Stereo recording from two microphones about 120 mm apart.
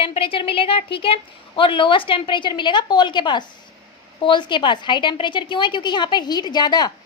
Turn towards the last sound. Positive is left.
turn(degrees=35)  # may be behind; listen again after turning